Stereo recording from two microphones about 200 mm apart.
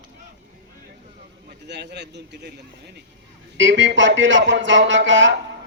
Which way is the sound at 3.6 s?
70° right (ahead or behind).